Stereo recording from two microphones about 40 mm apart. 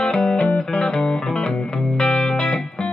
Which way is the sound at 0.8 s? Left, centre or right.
Centre.